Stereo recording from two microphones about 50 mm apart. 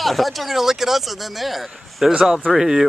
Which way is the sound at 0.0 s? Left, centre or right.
Centre.